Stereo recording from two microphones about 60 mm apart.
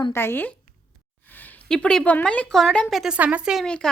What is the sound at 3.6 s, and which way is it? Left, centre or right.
Speech, centre.